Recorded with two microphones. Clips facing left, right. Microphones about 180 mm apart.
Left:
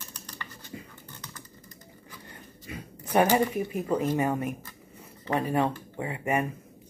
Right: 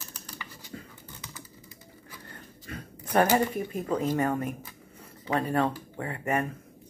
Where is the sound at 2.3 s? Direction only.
10° left (ahead or behind).